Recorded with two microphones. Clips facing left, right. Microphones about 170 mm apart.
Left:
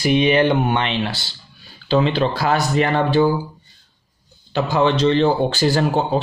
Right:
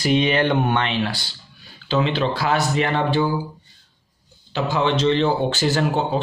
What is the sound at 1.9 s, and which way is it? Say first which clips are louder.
A man's voice: left 3 dB; 35° left (ahead or behind).